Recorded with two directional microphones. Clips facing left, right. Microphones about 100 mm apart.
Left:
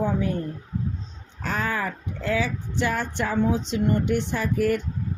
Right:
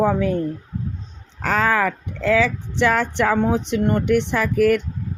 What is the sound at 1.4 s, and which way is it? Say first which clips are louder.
Speech: right 8 dB; 90° right.